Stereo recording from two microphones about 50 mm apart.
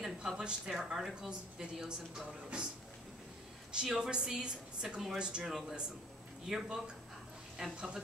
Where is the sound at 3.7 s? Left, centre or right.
Centre.